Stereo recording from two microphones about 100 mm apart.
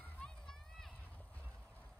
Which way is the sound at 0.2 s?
5° left (ahead or behind).